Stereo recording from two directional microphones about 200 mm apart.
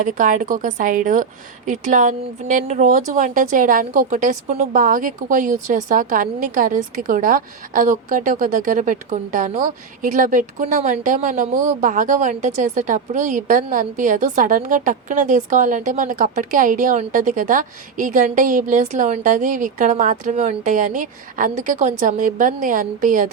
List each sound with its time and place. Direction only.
0.0 s a woman's voice: 40° right (ahead or behind)